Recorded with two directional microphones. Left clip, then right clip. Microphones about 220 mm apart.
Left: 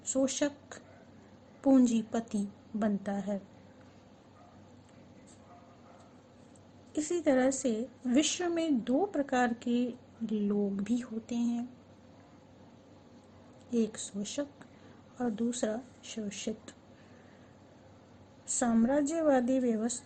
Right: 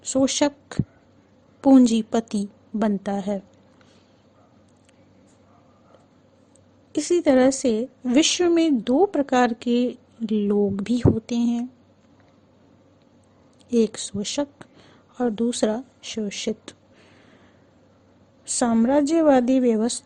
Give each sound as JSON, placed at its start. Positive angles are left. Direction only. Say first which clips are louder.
{"t": 0.0, "sound": "a woman's voice", "louder": "right 10 dB", "side_deg": -45}
{"t": 6.9, "sound": "a woman's voice", "louder": "right 10 dB", "side_deg": -45}
{"t": 13.7, "sound": "a woman's voice", "louder": "right 12 dB", "side_deg": -45}
{"t": 18.4, "sound": "a woman's voice", "louder": "right 9 dB", "side_deg": -45}